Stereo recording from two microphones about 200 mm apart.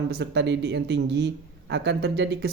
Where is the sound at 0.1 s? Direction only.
60° right (ahead or behind).